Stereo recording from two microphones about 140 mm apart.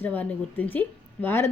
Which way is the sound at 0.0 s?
10° left (ahead or behind).